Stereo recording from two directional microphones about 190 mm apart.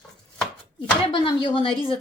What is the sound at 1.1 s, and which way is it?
Speech, 25° left (ahead or behind).